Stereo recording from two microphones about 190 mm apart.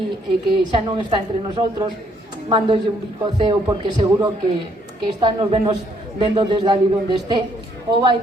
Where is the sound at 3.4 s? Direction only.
20° right (ahead or behind).